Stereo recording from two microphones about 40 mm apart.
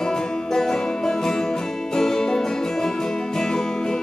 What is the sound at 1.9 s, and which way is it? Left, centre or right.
Music, centre.